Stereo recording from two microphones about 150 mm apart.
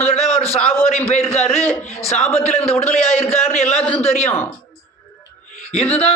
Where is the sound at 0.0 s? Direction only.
40° left (ahead or behind).